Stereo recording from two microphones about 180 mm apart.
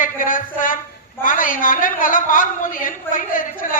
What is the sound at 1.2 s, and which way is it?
A woman's voice, 50° left (ahead or behind).